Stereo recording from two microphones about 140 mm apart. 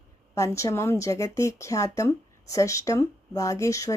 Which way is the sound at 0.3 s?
20° left (ahead or behind).